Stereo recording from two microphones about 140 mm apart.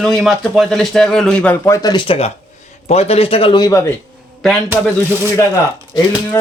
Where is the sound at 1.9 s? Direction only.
35° left (ahead or behind).